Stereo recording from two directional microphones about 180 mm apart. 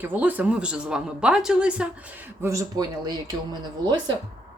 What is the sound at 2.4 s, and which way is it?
A woman's voice, 15° right (ahead or behind).